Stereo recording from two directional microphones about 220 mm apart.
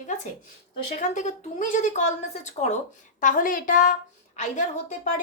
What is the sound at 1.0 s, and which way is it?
Speech, 35° left (ahead or behind).